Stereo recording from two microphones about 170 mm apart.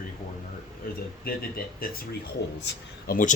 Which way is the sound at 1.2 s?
60° left (ahead or behind).